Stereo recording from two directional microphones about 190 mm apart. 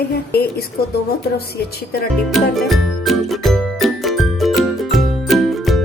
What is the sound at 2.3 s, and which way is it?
Music, centre (ahead or behind).